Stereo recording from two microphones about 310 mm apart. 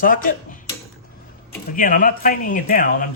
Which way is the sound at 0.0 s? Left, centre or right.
Left.